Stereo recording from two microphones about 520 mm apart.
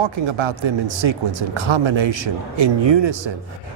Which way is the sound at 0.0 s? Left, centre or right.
Right.